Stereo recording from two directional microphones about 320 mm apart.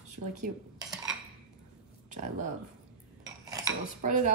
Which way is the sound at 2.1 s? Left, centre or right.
Right.